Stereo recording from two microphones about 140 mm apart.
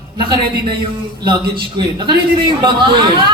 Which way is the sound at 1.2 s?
35° right (ahead or behind).